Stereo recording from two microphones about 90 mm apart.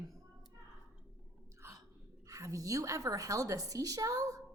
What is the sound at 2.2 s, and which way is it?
Speech, 35° right (ahead or behind).